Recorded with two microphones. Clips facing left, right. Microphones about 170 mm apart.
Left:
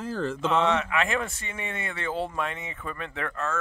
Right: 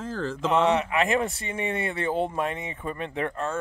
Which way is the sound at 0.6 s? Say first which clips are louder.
Right 3 dB; 35° right (ahead or behind).